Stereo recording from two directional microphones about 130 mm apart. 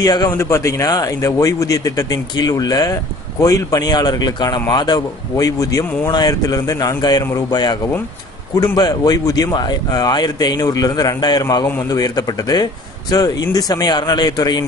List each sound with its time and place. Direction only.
0.0 s speech: 30° left (ahead or behind)